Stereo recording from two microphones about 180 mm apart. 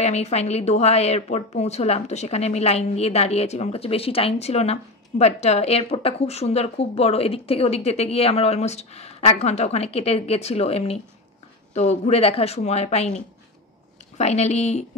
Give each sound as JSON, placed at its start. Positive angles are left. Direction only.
{"t": 0.0, "sound": "speech", "side_deg": 40}